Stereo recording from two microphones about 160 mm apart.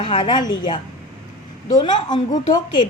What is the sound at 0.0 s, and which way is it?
A woman's voice, 30° left (ahead or behind).